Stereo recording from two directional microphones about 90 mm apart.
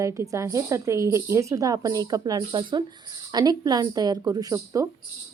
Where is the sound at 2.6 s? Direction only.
60° right (ahead or behind).